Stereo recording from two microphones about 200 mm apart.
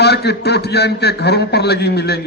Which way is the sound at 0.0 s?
55° left (ahead or behind).